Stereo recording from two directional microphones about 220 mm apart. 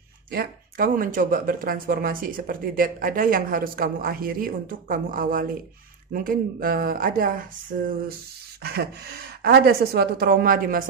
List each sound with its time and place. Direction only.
0.3 s speech: 45° right (ahead or behind)
8.6 s a woman's voice: 45° right (ahead or behind)